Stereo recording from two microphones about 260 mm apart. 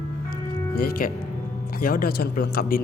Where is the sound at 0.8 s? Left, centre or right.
Left.